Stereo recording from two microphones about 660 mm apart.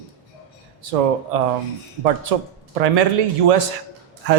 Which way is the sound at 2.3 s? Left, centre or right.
Right.